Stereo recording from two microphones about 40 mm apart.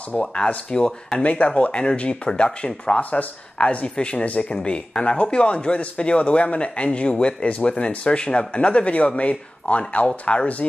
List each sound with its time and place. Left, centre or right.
0.1 s a man's voice: left
1.2 s a man's voice: left
3.0 s speech: left
3.7 s a man's voice: left